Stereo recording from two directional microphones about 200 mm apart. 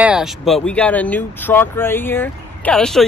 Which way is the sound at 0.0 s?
5° right (ahead or behind).